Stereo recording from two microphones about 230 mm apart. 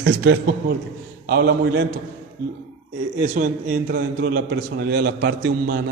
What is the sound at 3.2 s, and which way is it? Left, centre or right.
A man's voice, right.